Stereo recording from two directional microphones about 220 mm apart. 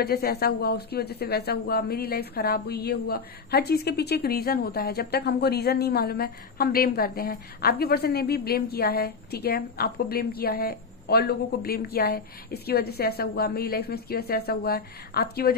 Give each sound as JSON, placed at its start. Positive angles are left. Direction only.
{"t": 0.0, "sound": "speech", "side_deg": 45}